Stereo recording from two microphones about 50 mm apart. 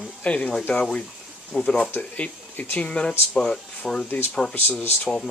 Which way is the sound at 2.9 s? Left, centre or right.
Left.